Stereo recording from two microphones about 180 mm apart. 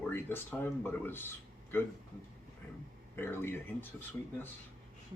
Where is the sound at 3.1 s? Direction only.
10° left (ahead or behind).